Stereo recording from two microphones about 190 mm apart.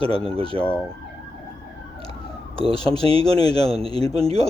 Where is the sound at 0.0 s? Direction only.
30° right (ahead or behind).